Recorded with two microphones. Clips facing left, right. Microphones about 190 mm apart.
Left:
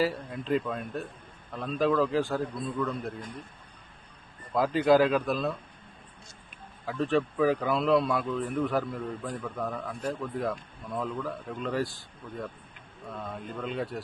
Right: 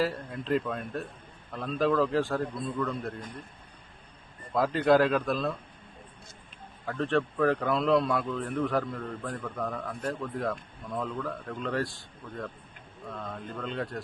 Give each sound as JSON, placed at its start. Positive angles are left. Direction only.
{"t": 0.0, "sound": "speech", "side_deg": 0}
{"t": 4.5, "sound": "speech", "side_deg": 0}
{"t": 6.8, "sound": "speech", "side_deg": 0}